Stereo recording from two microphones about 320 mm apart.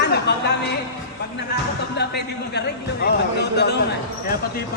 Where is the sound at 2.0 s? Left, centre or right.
Left.